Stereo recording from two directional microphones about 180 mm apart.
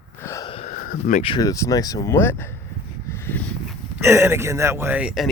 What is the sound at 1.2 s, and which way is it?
Speech, 25° left (ahead or behind).